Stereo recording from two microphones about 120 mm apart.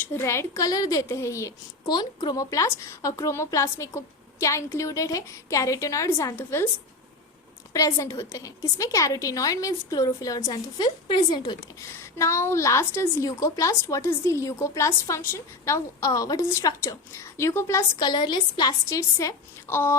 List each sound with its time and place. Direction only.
0.0 s a woman's voice: 20° left (ahead or behind)
1.9 s a woman's voice: 35° left (ahead or behind); by 6.7 s 20° left (ahead or behind)
7.7 s a woman's voice: 30° left (ahead or behind)
12.2 s a woman's voice: 25° left (ahead or behind)
18.1 s a woman's voice: 35° left (ahead or behind); by 20.0 s 20° left (ahead or behind)